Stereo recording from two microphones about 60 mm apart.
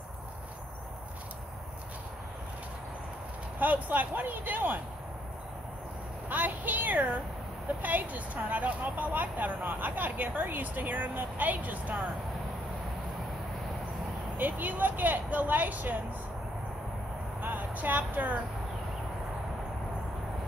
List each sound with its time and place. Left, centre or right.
3.5 s speech: right
6.2 s a sound: right
7.8 s speech: right
14.3 s speech: right
17.4 s speech: right